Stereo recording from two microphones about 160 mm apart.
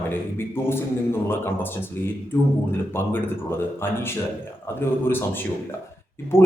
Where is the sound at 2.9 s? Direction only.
15° left (ahead or behind).